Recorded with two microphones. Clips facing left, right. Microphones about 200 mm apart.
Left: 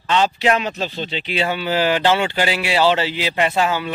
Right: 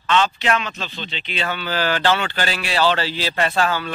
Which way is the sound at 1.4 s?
25° left (ahead or behind).